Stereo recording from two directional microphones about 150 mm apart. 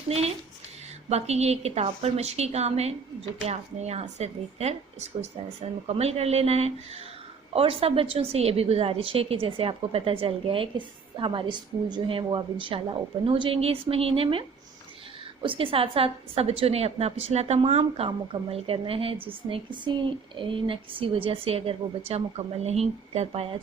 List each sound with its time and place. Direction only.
1.1 s a woman's voice: 45° right (ahead or behind)